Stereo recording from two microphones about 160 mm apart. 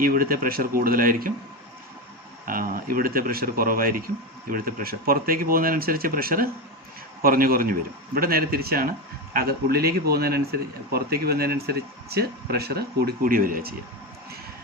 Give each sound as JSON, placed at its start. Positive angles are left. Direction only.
{"t": 0.0, "sound": "speech", "side_deg": -65}
{"t": 2.5, "sound": "a man's voice", "side_deg": -60}